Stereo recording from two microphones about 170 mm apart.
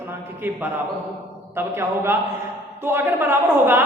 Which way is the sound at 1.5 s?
15° right (ahead or behind).